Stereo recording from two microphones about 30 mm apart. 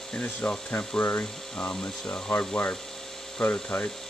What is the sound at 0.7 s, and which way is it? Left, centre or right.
Speech, left.